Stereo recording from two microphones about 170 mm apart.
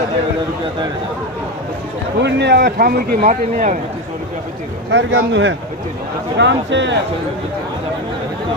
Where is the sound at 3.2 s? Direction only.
45° right (ahead or behind).